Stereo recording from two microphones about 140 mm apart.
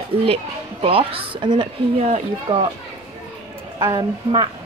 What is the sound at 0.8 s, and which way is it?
Speech, 40° right (ahead or behind).